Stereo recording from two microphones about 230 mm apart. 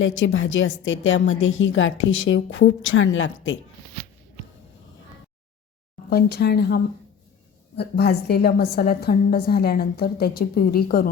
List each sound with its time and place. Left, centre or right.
0.0 s a woman's voice: left
6.1 s a woman's voice: left